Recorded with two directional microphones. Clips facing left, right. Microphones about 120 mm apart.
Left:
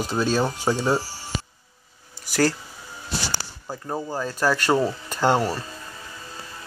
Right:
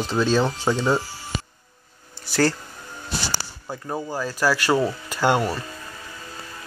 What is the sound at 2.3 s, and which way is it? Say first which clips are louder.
Speech: right 1 dB; 10° left (ahead or behind).